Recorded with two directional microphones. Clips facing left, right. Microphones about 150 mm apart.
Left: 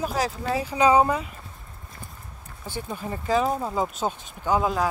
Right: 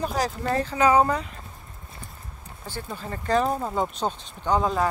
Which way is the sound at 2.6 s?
15° left (ahead or behind).